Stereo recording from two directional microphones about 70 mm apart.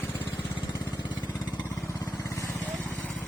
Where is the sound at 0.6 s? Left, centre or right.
Left.